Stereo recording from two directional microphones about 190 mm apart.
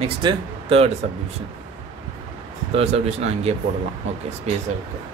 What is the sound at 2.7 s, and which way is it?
Speech, 35° right (ahead or behind).